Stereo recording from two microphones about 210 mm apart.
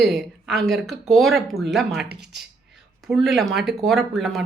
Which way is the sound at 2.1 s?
50° right (ahead or behind).